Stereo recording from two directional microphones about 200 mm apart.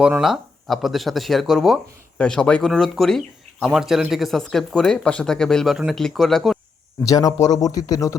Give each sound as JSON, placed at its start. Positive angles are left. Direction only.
{"t": 0.0, "sound": "speech", "side_deg": -5}
{"t": 7.0, "sound": "speech", "side_deg": 15}